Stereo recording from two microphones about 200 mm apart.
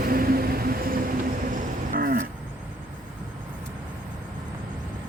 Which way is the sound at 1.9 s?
45° right (ahead or behind).